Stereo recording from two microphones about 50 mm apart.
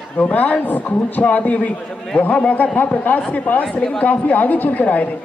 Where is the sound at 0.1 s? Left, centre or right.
Left.